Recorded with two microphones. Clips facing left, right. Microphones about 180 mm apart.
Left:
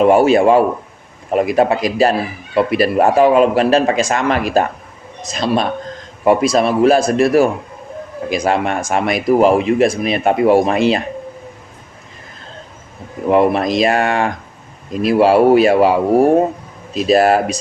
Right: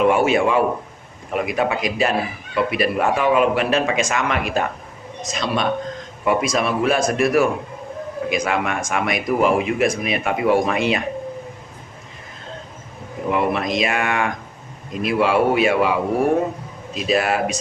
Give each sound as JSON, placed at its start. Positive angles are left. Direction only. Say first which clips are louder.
{"t": 0.0, "sound": "a man's voice", "louder": "left 6 dB", "side_deg": 35}
{"t": 13.3, "sound": "speech", "louder": "left 8 dB", "side_deg": 35}